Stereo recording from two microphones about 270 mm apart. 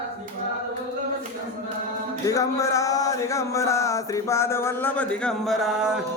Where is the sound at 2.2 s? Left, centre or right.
Centre.